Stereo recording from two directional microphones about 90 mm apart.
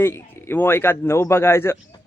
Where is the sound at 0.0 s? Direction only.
25° left (ahead or behind).